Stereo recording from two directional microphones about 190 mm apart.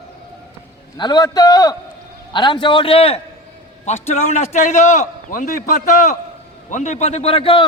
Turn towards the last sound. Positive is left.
turn(degrees=30)  # may be behind; listen again after turning